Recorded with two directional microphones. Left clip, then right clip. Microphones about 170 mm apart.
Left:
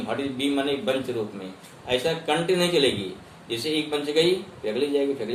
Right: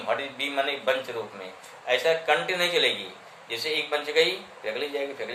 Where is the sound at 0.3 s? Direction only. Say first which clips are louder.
Left 2 dB; 10° left (ahead or behind).